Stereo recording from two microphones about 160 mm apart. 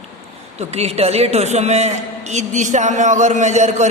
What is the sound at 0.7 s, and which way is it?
A man's voice, 40° right (ahead or behind).